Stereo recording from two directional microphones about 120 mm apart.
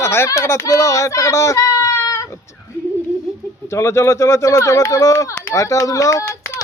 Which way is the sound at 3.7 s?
25° left (ahead or behind).